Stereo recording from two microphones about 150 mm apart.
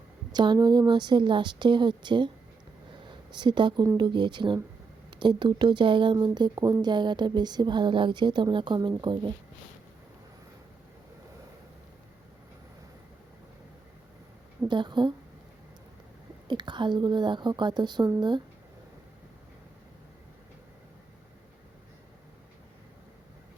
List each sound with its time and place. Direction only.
0.3 s speech: 30° right (ahead or behind)
3.3 s speech: 30° right (ahead or behind)
14.7 s speech: 30° right (ahead or behind)
16.5 s speech: 30° right (ahead or behind)